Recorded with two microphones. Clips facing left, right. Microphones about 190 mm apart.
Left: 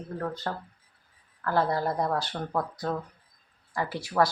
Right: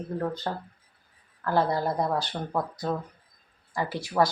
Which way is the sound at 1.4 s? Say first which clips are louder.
Right 1 dB; 20° right (ahead or behind).